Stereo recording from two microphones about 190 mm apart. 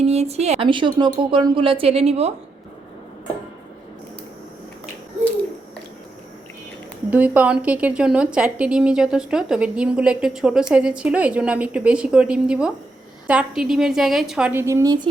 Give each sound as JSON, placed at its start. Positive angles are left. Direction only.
{"t": 0.0, "sound": "a woman's voice", "side_deg": -35}
{"t": 7.1, "sound": "a woman's voice", "side_deg": -10}